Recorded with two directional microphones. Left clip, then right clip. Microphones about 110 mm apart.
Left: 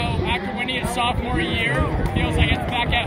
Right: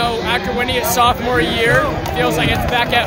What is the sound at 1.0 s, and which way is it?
Speech, 45° right (ahead or behind).